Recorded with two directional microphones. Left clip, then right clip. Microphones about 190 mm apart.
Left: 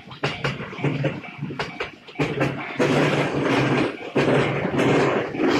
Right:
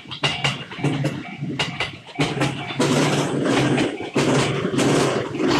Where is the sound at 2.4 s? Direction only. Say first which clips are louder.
Even; 55° right (ahead or behind).